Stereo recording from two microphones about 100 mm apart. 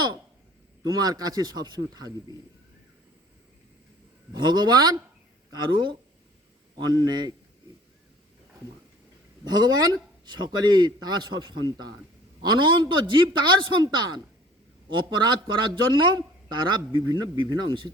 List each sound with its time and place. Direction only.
0.9 s speech: 40° right (ahead or behind)
4.4 s a man's voice: 45° right (ahead or behind)
9.4 s a man's voice: 40° right (ahead or behind)